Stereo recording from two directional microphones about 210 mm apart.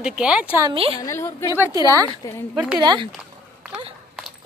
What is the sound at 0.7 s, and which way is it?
Speech, 25° right (ahead or behind).